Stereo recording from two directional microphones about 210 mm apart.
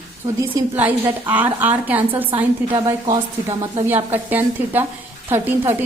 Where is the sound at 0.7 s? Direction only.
10° right (ahead or behind).